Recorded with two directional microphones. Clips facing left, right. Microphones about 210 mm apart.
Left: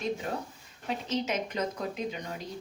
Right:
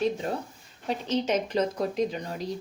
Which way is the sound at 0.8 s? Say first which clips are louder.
Right 4 dB; 30° right (ahead or behind).